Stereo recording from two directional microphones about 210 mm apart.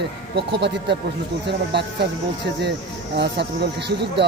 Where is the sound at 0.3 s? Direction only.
55° right (ahead or behind).